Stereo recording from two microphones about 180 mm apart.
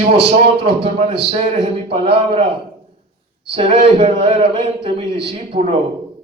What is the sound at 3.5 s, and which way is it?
A man's voice, 30° right (ahead or behind).